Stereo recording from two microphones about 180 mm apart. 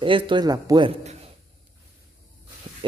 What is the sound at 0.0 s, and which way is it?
Speech, 25° right (ahead or behind).